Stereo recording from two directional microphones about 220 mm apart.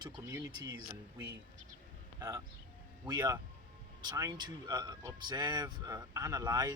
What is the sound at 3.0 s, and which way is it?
Speech, 15° right (ahead or behind).